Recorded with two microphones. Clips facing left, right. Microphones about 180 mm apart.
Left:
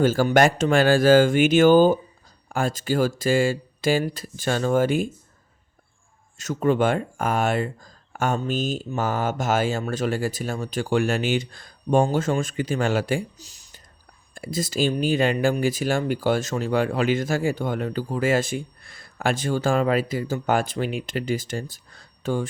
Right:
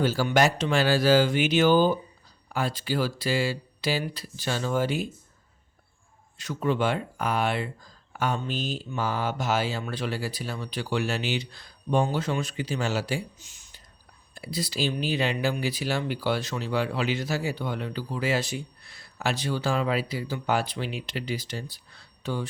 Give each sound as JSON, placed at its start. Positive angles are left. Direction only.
{"t": 0.0, "sound": "speech", "side_deg": 50}
{"t": 6.3, "sound": "speech", "side_deg": 45}
{"t": 13.4, "sound": "a sound", "side_deg": 35}
{"t": 14.3, "sound": "speech", "side_deg": 45}